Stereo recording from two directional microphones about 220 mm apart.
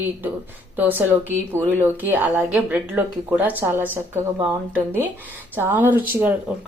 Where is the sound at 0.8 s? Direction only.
10° right (ahead or behind).